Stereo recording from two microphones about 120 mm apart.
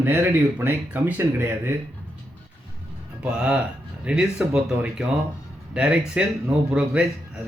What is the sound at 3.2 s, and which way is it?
Speech, 10° right (ahead or behind).